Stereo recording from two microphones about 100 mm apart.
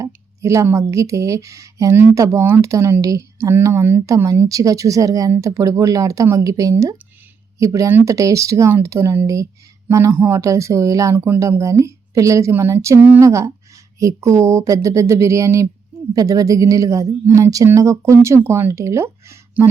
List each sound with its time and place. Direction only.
0.0 s speech: 30° right (ahead or behind)